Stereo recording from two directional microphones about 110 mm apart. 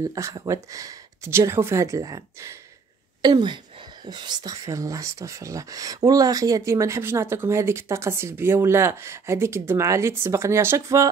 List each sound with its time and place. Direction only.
0.1 s speech: 30° right (ahead or behind)